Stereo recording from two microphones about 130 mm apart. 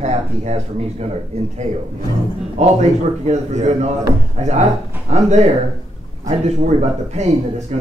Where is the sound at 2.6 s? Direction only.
60° right (ahead or behind).